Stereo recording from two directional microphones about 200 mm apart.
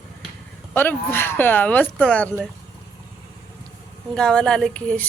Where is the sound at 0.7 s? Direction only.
10° left (ahead or behind).